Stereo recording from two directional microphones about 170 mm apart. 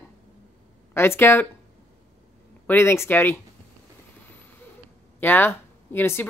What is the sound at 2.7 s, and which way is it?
Speech, 15° left (ahead or behind).